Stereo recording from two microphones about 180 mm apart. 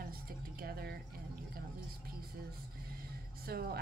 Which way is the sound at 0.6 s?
55° right (ahead or behind).